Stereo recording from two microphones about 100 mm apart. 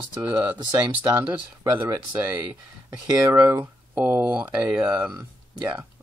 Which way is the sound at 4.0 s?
20° right (ahead or behind).